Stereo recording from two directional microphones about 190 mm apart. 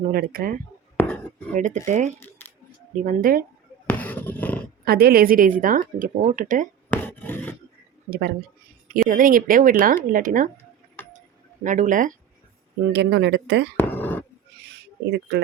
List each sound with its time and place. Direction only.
0.1 s a woman's voice: 50° right (ahead or behind)
0.9 s a sound: 10° left (ahead or behind)
1.5 s speech: 40° right (ahead or behind)
2.1 s scissors: 10° left (ahead or behind)
3.0 s a woman's voice: 45° right (ahead or behind)
3.8 s a sound: 10° left (ahead or behind)
4.9 s a woman's voice: 50° right (ahead or behind)
6.9 s a sound: 10° left (ahead or behind)
9.0 s a woman's voice: 45° right (ahead or behind)
11.6 s a woman's voice: 40° right (ahead or behind)
12.9 s speech: 65° right (ahead or behind)
13.7 s a sound: 10° left (ahead or behind)
15.0 s speech: 60° right (ahead or behind)